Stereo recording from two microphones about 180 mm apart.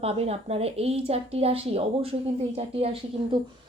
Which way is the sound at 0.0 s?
35° right (ahead or behind).